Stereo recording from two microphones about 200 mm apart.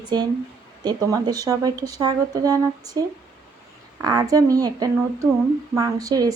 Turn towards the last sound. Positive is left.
turn(degrees=-20)  # may be behind; listen again after turning